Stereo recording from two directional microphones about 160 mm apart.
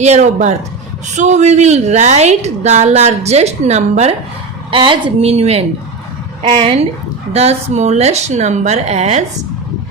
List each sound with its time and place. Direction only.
0.0 s a woman's voice: 45° right (ahead or behind)
4.7 s a woman's voice: 30° right (ahead or behind)